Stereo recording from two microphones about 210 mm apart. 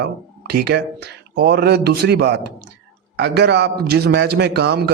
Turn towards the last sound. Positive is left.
turn(degrees=-50)  # may be behind; listen again after turning